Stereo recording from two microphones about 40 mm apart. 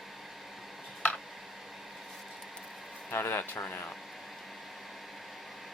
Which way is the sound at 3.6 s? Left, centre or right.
Left.